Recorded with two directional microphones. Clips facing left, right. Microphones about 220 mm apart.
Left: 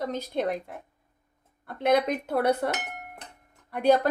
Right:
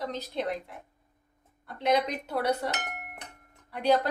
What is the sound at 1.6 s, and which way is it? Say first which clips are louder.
A woman's voice: left 3 dB; 55° left (ahead or behind).